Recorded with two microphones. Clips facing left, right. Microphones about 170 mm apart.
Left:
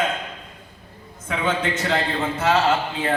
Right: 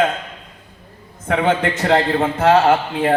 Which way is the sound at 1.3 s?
65° right (ahead or behind).